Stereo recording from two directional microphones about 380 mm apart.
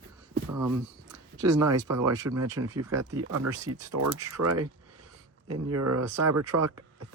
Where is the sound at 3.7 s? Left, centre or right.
Right.